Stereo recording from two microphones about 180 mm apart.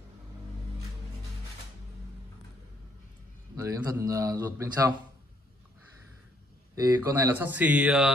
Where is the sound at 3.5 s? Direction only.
15° right (ahead or behind).